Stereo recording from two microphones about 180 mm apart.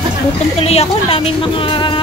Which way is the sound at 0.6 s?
35° left (ahead or behind).